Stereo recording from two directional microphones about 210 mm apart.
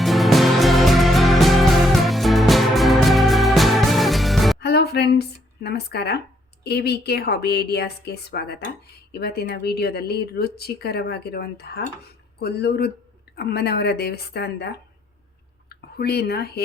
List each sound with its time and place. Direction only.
0.0 s music: centre (ahead or behind)
4.6 s music: 50° left (ahead or behind)
5.6 s speech: 50° left (ahead or behind)